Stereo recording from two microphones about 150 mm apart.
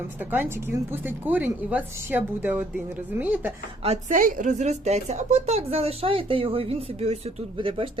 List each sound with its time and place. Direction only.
0.2 s speech: 10° right (ahead or behind)
3.8 s a woman's voice: 55° right (ahead or behind); by 7.9 s 35° right (ahead or behind)